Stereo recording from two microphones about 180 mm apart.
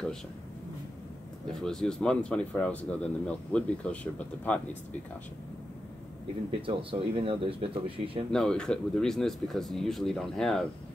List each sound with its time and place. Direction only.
1.5 s speech: 5° left (ahead or behind)
6.6 s speech: 30° right (ahead or behind)
8.3 s speech: 5° left (ahead or behind)